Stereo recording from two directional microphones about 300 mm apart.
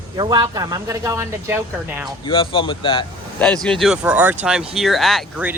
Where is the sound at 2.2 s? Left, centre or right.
Centre.